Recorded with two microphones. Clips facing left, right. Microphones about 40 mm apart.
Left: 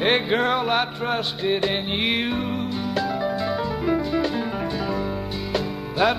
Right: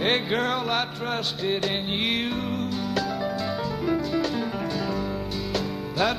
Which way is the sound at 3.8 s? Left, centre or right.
Centre.